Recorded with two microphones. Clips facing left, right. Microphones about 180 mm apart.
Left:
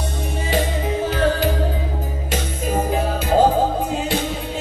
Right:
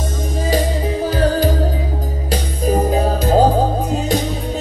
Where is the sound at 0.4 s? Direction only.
40° right (ahead or behind).